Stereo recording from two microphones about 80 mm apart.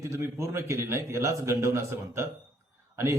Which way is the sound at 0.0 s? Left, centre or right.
Right.